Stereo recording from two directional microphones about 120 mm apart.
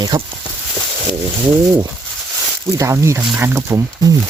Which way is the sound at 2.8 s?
25° right (ahead or behind).